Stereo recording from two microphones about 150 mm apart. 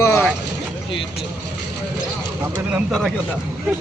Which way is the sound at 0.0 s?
20° left (ahead or behind).